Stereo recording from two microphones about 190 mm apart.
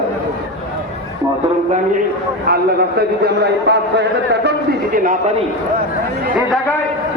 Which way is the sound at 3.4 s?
65° right (ahead or behind).